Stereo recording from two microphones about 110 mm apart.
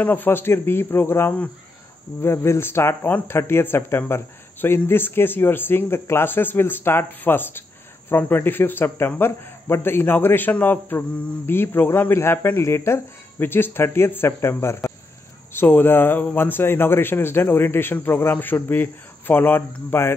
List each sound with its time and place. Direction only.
0.0 s a man's voice: 15° left (ahead or behind)